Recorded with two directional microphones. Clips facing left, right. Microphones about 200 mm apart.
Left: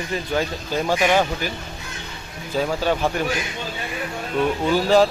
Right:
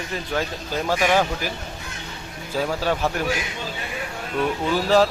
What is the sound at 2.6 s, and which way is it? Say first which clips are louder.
Speech: left 1 dB; centre (ahead or behind).